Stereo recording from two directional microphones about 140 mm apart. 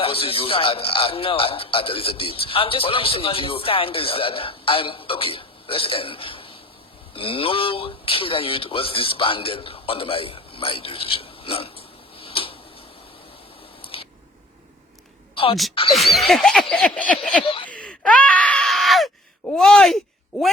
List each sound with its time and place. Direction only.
0.0 s a man's voice: 40° left (ahead or behind)
12.1 s tick-tock: 40° left (ahead or behind)
13.8 s scissors: 40° left (ahead or behind)
15.9 s speech: centre (ahead or behind)
16.3 s a sound: 5° left (ahead or behind)
17.4 s a man's voice: 40° left (ahead or behind)
17.7 s groan: 10° left (ahead or behind)
19.5 s speech: 5° left (ahead or behind)